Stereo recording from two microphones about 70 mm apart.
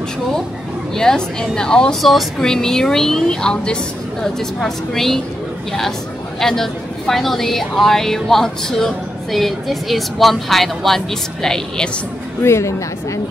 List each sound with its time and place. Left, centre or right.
0.9 s a woman's voice: centre
12.4 s a woman's voice: left